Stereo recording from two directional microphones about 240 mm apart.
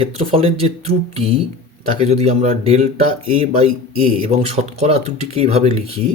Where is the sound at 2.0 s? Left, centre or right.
Right.